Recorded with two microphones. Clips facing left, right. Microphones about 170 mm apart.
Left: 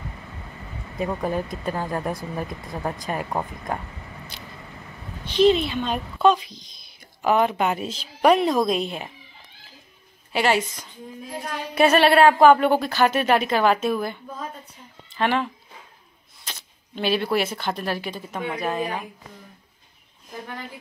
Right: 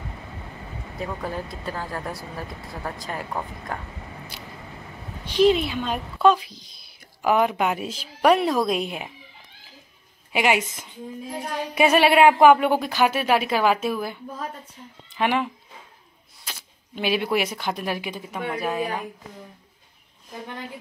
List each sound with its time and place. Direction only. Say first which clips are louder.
1.2 s speech: left 5 dB; 20° left (ahead or behind)
5.2 s speech: left 1 dB; 10° right (ahead or behind)
10.3 s speech: even; 15° right (ahead or behind)
11.7 s speech: left 1 dB; 10° right (ahead or behind)